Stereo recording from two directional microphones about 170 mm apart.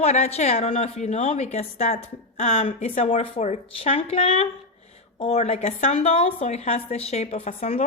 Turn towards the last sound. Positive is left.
turn(degrees=40)  # may be behind; listen again after turning